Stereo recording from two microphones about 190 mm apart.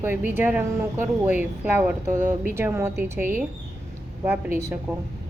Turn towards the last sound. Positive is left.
turn(degrees=35)  # may be behind; listen again after turning